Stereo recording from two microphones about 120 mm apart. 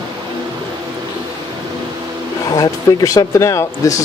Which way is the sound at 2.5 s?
30° left (ahead or behind).